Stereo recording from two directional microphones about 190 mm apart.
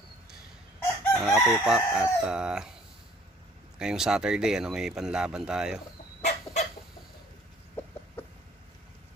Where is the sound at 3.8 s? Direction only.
5° right (ahead or behind).